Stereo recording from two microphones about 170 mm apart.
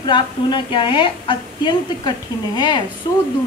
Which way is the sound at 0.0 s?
25° left (ahead or behind).